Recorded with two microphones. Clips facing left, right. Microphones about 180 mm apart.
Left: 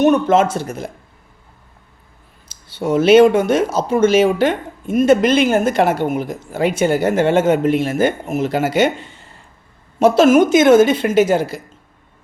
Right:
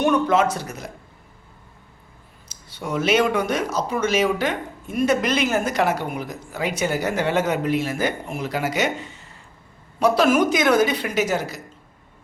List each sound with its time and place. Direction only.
0.1 s speech: 25° left (ahead or behind)
2.5 s speech: 30° left (ahead or behind)